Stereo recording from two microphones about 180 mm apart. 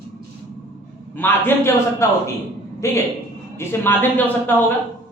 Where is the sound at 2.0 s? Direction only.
15° left (ahead or behind).